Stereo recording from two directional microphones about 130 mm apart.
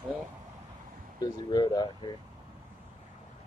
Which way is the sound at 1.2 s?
30° left (ahead or behind).